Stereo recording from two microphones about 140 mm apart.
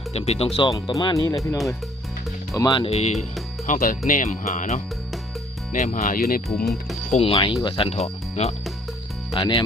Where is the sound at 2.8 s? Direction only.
50° left (ahead or behind).